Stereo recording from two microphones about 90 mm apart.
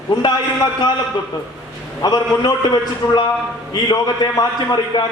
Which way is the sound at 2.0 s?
50° left (ahead or behind).